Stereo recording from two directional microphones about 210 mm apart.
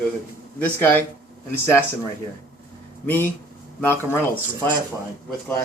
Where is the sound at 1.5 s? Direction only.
10° left (ahead or behind).